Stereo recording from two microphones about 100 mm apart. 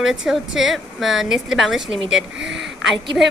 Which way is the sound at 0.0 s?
5° right (ahead or behind).